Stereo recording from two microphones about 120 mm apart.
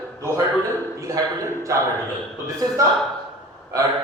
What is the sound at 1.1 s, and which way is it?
Speech, 30° right (ahead or behind).